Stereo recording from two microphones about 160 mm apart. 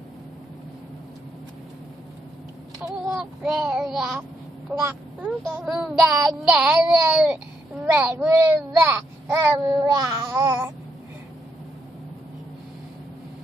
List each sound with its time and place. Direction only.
2.8 s child singing: centre (ahead or behind)
4.7 s speech: 10° right (ahead or behind)
5.6 s child singing: centre (ahead or behind)
7.8 s speech: 15° right (ahead or behind)